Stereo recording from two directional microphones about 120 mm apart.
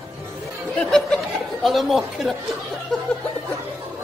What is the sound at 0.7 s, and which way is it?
Speech, 5° left (ahead or behind).